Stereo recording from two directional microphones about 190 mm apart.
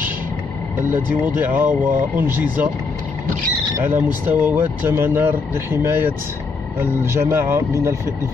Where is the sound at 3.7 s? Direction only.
10° right (ahead or behind).